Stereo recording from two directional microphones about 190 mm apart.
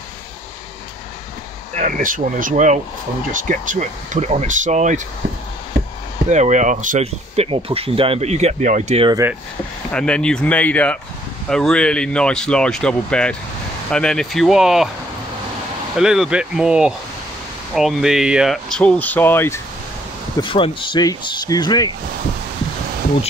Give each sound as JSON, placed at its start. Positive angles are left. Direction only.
{"t": 1.8, "sound": "speech", "side_deg": -40}
{"t": 6.3, "sound": "speech", "side_deg": -40}
{"t": 9.9, "sound": "speech", "side_deg": 5}
{"t": 16.0, "sound": "speech", "side_deg": -5}
{"t": 20.4, "sound": "speech", "side_deg": 25}